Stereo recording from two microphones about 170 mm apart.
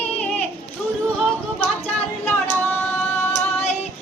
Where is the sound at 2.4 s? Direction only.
10° left (ahead or behind).